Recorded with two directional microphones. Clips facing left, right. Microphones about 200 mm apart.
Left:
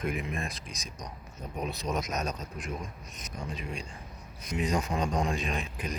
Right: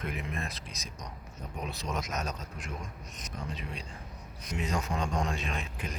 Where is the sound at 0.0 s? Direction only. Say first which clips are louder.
Left 4 dB; 15° left (ahead or behind).